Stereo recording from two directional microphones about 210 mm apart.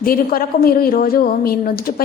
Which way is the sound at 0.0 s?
45° left (ahead or behind).